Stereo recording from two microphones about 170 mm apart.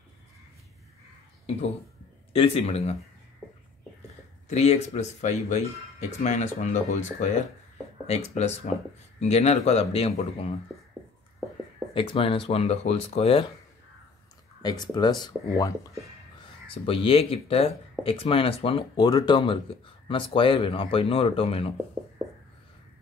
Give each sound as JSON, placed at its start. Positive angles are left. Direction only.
{"t": 2.3, "sound": "speech", "side_deg": 35}
{"t": 4.5, "sound": "speech", "side_deg": 40}
{"t": 8.1, "sound": "speech", "side_deg": 40}
{"t": 11.9, "sound": "speech", "side_deg": 30}
{"t": 14.6, "sound": "speech", "side_deg": 25}